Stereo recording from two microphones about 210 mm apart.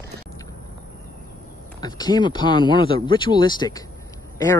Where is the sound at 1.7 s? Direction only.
20° left (ahead or behind).